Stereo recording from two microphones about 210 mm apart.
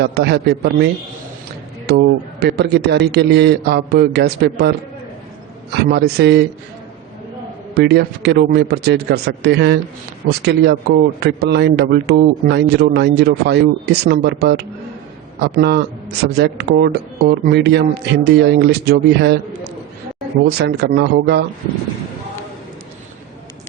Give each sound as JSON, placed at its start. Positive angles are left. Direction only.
{"t": 0.0, "sound": "a man's voice", "side_deg": -50}
{"t": 1.9, "sound": "a man's voice", "side_deg": -50}
{"t": 5.7, "sound": "a man's voice", "side_deg": -50}
{"t": 7.8, "sound": "a man's voice", "side_deg": -50}